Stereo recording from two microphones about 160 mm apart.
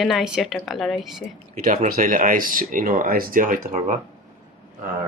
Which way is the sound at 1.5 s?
60° right (ahead or behind).